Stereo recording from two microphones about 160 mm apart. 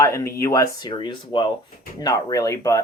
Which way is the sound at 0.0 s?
20° left (ahead or behind).